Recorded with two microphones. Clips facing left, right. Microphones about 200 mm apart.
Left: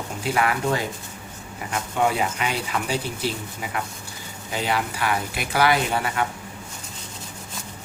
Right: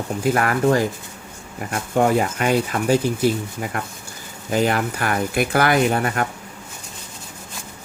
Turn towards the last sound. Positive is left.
turn(degrees=-50)  # may be behind; listen again after turning